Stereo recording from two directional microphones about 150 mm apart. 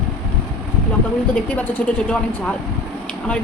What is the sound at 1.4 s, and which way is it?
A woman's voice, 10° left (ahead or behind).